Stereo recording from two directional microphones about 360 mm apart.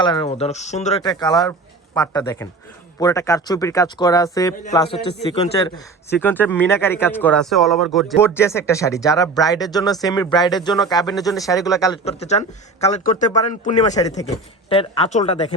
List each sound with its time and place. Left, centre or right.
0.0 s speech: centre
11.1 s a man's voice: centre